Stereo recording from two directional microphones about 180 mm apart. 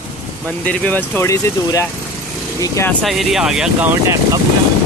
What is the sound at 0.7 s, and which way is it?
Speech, 10° left (ahead or behind).